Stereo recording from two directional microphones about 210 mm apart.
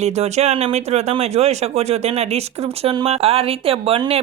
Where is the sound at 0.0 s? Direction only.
30° right (ahead or behind).